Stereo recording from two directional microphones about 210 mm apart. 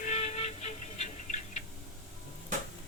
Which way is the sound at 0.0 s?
30° left (ahead or behind).